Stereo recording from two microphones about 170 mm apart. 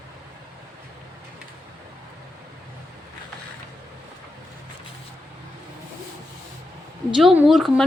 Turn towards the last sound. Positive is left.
turn(degrees=0)  # may be behind; listen again after turning